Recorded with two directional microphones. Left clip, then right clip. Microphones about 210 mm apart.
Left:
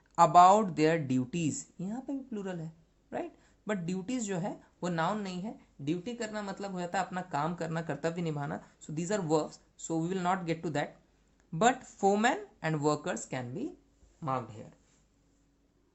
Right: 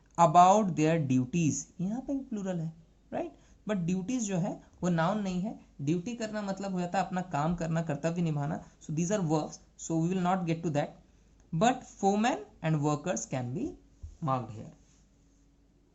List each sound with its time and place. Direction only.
0.2 s speech: 50° left (ahead or behind)
2.0 s speech: 25° left (ahead or behind)
3.7 s speech: 45° left (ahead or behind)
12.1 s speech: 40° left (ahead or behind)